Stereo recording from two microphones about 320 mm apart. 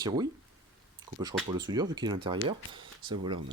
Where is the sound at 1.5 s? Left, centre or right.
Centre.